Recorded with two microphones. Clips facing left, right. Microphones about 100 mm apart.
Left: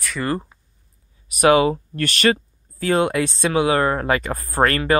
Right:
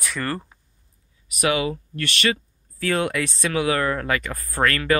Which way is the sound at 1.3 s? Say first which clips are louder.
Left 8 dB; 35° left (ahead or behind).